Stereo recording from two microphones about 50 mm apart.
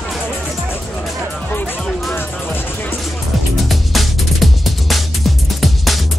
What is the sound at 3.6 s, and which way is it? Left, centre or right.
Music, centre.